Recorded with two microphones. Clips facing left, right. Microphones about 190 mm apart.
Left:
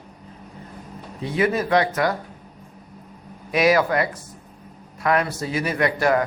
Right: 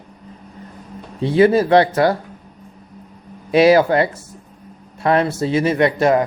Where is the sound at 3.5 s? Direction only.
30° right (ahead or behind).